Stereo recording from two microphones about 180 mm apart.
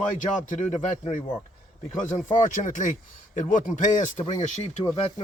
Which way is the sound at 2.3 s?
45° left (ahead or behind).